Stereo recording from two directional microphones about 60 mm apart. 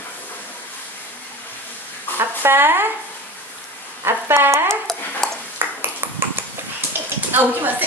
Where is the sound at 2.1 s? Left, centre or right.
Right.